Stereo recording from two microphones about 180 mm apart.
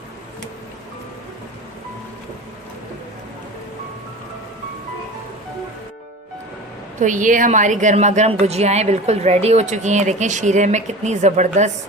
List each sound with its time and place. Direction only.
7.0 s a woman's voice: 45° right (ahead or behind)